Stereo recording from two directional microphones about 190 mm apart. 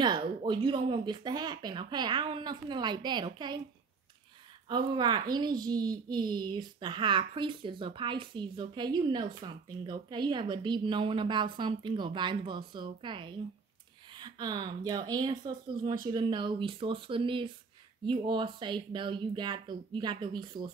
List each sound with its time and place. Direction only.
0.0 s a woman's voice: 25° right (ahead or behind)
4.6 s a woman's voice: 25° right (ahead or behind)